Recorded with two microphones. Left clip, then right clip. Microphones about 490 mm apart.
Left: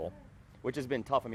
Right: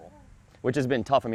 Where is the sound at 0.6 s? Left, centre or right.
Right.